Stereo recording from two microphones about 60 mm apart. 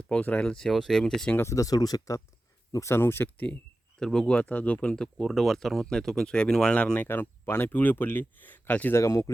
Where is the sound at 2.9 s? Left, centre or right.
Left.